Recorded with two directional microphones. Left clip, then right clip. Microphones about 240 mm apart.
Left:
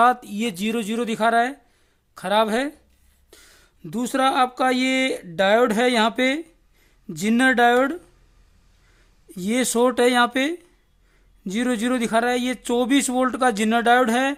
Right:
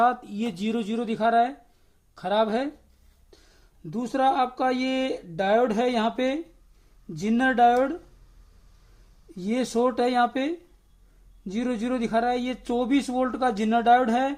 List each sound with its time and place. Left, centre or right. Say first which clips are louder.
0.0 s speech: left 5 dB; left
9.3 s speech: left 4 dB; left